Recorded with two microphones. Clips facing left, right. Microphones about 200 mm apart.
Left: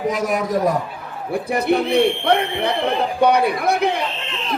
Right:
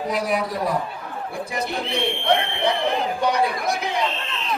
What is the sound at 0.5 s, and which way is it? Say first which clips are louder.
Speech: left 6 dB; 45° left (ahead or behind).